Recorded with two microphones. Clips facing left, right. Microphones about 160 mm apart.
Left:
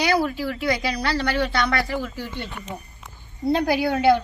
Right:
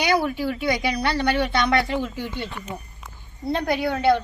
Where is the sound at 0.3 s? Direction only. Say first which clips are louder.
Right 1 dB; 20° right (ahead or behind).